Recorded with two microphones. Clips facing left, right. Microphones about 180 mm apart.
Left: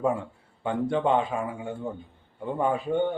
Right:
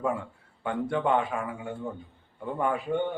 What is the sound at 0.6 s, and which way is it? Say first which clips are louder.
Speech: left 3 dB; 25° left (ahead or behind).